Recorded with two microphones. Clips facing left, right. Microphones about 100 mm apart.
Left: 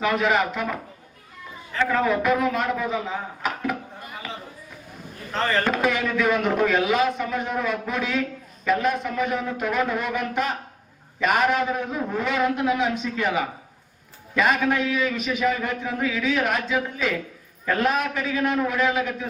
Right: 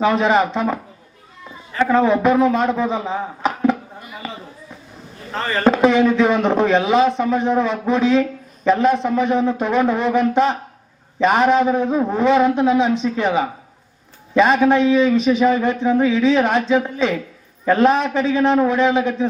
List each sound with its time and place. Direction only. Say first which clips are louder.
0.0 s a man's voice: right 6 dB; 25° right (ahead or behind)
1.8 s a man's voice: right 7 dB; 25° right (ahead or behind)
5.6 s a man's voice: right 9 dB; 25° right (ahead or behind)